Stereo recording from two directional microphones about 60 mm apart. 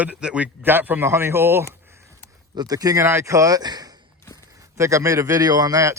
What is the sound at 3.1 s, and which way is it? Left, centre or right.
Speech, right.